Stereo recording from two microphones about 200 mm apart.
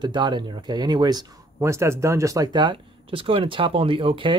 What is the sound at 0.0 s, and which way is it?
Speech, 20° right (ahead or behind).